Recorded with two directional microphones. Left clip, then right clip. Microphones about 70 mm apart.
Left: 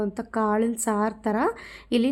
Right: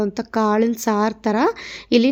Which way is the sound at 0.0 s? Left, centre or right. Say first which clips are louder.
Right 6 dB; right.